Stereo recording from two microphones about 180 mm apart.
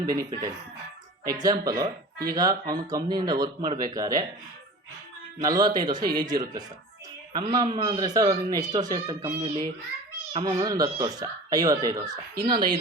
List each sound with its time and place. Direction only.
0.0 s speech: 20° right (ahead or behind)
1.3 s speech: 20° right (ahead or behind)
5.4 s speech: 20° right (ahead or behind)
10.4 s speech: 20° right (ahead or behind)